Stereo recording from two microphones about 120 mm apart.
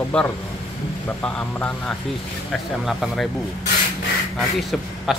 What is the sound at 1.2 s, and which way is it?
Speech, 10° left (ahead or behind).